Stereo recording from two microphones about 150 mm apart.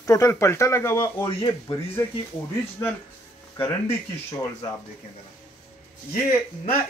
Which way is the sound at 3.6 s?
15° left (ahead or behind).